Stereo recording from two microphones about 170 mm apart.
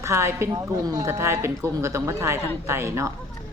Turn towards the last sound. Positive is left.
turn(degrees=-15)  # may be behind; listen again after turning